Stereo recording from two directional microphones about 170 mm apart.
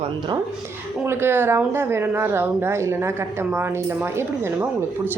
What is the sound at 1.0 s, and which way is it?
A woman's voice, 15° right (ahead or behind).